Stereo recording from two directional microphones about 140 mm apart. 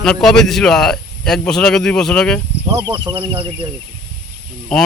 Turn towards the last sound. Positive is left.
turn(degrees=0)  # may be behind; listen again after turning